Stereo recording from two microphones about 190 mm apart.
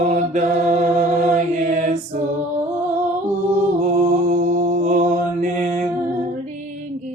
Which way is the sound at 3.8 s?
40° right (ahead or behind).